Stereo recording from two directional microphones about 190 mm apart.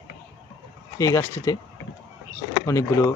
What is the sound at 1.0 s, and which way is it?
Speech, 15° left (ahead or behind).